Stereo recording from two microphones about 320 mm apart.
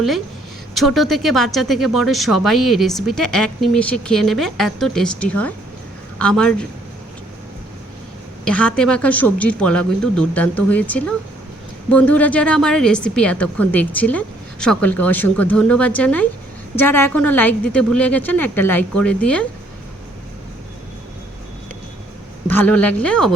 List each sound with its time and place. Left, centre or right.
0.7 s speech: centre
8.4 s speech: centre
22.4 s speech: centre